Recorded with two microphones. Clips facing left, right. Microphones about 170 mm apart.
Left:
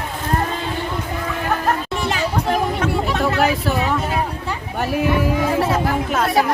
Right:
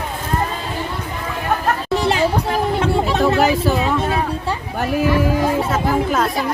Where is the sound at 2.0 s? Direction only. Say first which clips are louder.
Right 5 dB; 30° right (ahead or behind).